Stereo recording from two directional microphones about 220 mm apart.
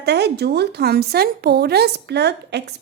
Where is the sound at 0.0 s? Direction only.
50° right (ahead or behind).